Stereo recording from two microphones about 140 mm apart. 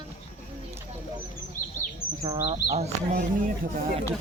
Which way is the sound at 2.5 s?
50° right (ahead or behind).